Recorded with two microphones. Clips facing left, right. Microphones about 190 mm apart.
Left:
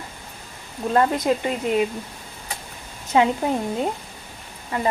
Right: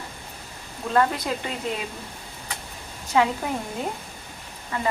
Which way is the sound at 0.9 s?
20° left (ahead or behind).